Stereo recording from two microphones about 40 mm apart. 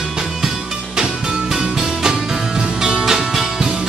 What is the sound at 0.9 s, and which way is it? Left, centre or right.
Music, centre.